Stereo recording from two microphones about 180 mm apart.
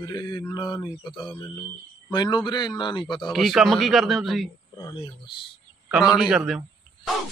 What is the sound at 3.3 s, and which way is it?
Speech, centre (ahead or behind).